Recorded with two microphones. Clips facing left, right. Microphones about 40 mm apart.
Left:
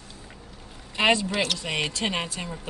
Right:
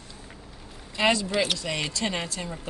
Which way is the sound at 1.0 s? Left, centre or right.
Left.